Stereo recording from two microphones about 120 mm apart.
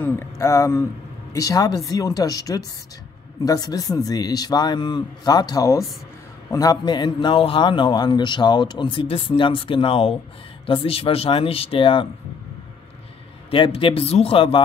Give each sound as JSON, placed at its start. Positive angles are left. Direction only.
{"t": 0.0, "sound": "a man's voice", "side_deg": 20}
{"t": 13.5, "sound": "speech", "side_deg": 50}